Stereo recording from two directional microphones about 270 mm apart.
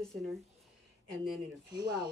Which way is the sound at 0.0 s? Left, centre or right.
Centre.